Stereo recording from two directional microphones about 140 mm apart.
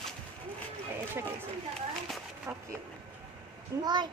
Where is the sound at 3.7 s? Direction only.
20° right (ahead or behind).